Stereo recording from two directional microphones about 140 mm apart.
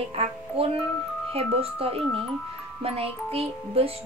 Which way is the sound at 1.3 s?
45° right (ahead or behind).